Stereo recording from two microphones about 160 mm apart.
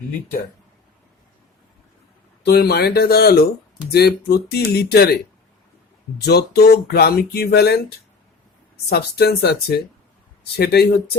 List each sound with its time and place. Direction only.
2.4 s speech: 75° left (ahead or behind)
6.2 s speech: 80° left